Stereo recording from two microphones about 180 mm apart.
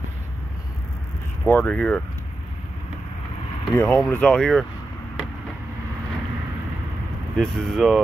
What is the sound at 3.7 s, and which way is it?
Speech, 15° left (ahead or behind).